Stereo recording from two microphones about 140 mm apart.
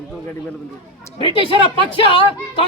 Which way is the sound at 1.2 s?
40° left (ahead or behind).